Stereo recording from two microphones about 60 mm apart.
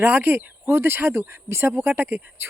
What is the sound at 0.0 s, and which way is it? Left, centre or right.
Speech, right.